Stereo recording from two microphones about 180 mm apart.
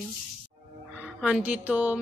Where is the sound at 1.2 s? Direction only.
5° right (ahead or behind).